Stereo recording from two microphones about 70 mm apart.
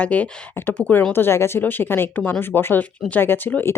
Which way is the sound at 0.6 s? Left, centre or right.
Left.